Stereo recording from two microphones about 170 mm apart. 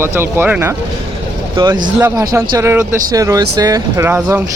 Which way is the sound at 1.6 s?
25° right (ahead or behind).